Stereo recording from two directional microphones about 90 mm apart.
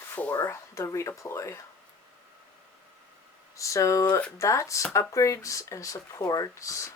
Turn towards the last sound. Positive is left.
turn(degrees=35)  # may be behind; listen again after turning